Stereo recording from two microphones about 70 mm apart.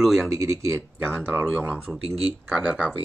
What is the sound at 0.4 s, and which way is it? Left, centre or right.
Speech, right.